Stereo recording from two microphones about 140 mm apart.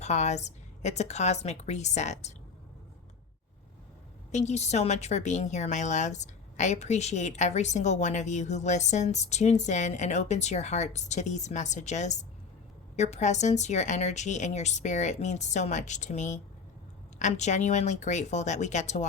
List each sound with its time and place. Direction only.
0.0 s a woman's voice: 55° left (ahead or behind)
4.3 s a woman's voice: 55° left (ahead or behind)